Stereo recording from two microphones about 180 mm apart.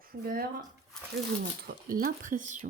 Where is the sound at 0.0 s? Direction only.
55° right (ahead or behind).